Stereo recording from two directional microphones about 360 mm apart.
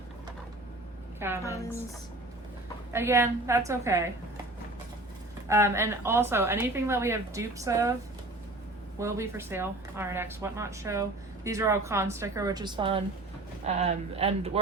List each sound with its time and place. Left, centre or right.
1.2 s a woman's voice: centre
2.9 s a woman's voice: centre
5.5 s a woman's voice: centre
9.0 s a woman's voice: centre